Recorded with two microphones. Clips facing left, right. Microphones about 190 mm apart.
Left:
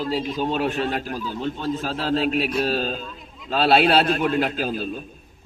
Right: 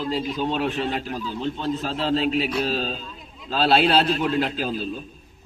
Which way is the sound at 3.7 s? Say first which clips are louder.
Left 1 dB; 55° left (ahead or behind).